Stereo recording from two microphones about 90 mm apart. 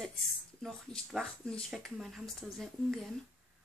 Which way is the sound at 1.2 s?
10° left (ahead or behind).